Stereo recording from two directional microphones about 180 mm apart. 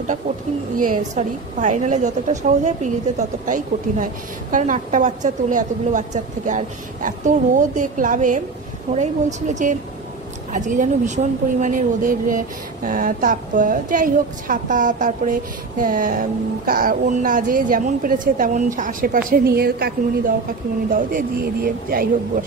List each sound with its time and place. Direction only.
0.7 s a woman's voice: 45° right (ahead or behind)